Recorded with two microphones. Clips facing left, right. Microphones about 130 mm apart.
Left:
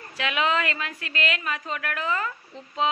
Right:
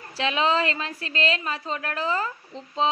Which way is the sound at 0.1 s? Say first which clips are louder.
Right 2 dB; 30° right (ahead or behind).